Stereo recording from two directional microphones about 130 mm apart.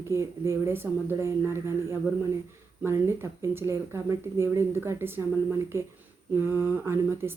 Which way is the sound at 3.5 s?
20° right (ahead or behind).